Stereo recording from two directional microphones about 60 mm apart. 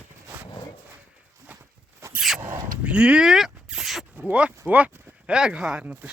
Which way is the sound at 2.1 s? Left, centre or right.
Centre.